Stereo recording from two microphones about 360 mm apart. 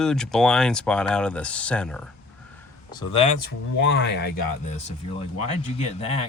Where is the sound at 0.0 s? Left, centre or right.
Centre.